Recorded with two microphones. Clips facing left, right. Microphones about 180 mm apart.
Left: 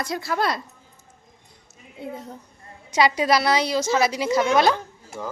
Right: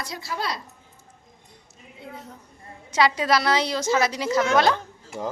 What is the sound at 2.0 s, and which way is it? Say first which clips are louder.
Speech: left 7 dB; 55° left (ahead or behind).